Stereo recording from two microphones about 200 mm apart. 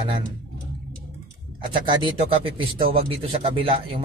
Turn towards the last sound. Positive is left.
turn(degrees=-25)  # may be behind; listen again after turning